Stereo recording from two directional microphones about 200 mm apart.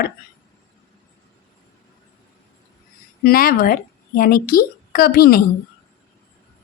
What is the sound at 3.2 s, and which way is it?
Speech, 45° left (ahead or behind).